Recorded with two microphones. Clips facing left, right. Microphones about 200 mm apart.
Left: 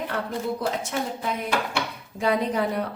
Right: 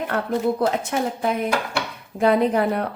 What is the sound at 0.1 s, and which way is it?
A woman's voice, 60° right (ahead or behind).